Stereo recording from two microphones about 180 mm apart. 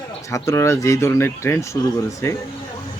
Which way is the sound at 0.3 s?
15° left (ahead or behind).